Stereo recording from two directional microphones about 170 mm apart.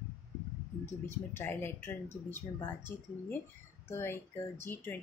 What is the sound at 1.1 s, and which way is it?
Speech, 15° left (ahead or behind).